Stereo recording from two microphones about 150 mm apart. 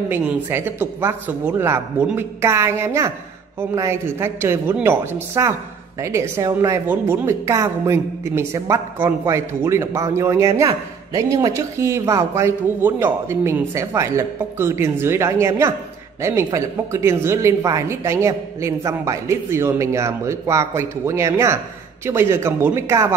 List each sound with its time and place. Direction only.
0.1 s speech: 15° right (ahead or behind)